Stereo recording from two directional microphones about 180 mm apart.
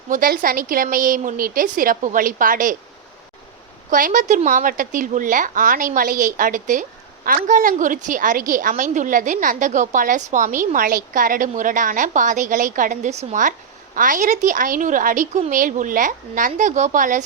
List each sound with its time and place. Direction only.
0.1 s a woman's voice: 50° right (ahead or behind)
3.8 s a woman's voice: 45° right (ahead or behind)